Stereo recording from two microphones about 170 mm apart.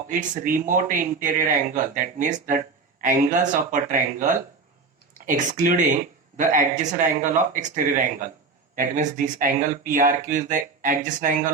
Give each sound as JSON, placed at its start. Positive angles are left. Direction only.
{"t": 0.1, "sound": "speech", "side_deg": -55}